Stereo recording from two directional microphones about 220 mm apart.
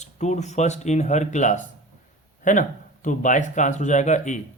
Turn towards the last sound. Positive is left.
turn(degrees=35)  # may be behind; listen again after turning